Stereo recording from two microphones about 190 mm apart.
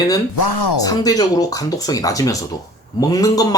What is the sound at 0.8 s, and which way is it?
Speech, 20° left (ahead or behind).